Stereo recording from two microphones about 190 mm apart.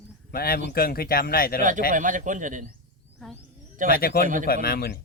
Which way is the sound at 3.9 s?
55° left (ahead or behind).